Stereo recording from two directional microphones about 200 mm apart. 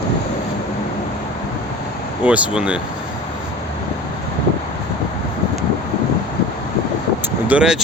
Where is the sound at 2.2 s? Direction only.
5° right (ahead or behind).